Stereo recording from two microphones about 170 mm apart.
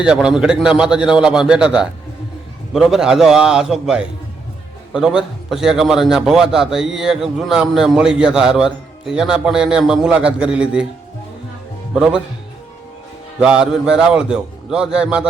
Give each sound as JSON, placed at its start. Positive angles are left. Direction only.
{"t": 0.0, "sound": "a man's voice", "side_deg": -5}
{"t": 13.4, "sound": "a man's voice", "side_deg": -5}